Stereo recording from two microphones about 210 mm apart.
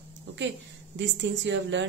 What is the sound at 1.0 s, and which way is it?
Speech, 60° right (ahead or behind).